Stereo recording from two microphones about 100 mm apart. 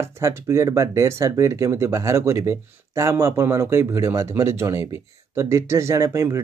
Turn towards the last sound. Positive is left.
turn(degrees=-30)  # may be behind; listen again after turning